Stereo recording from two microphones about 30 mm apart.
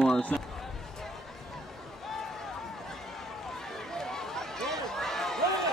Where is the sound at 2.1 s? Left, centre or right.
Centre.